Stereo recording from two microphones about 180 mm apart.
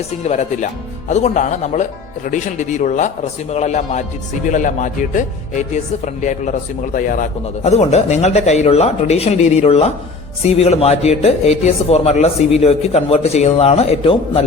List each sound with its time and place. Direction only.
0.3 s speech: 40° left (ahead or behind)